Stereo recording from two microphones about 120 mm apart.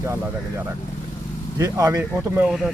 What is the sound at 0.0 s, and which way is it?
Speech, 25° right (ahead or behind).